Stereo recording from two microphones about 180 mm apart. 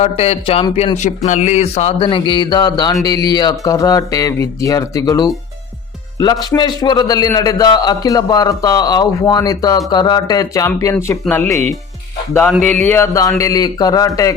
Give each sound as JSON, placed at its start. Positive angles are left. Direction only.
{"t": 0.0, "sound": "a man's voice", "side_deg": 35}